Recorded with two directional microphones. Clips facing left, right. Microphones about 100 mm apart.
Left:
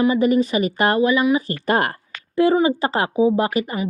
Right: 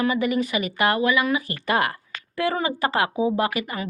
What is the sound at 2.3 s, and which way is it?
A woman's voice, 25° left (ahead or behind).